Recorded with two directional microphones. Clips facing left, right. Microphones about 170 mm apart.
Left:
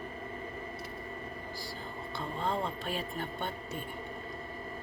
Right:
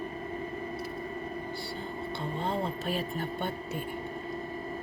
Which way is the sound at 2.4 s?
35° right (ahead or behind).